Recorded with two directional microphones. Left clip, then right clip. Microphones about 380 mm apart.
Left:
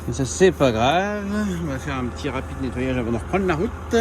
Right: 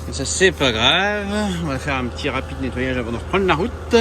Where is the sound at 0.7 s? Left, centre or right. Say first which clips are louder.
Right 3 dB; centre.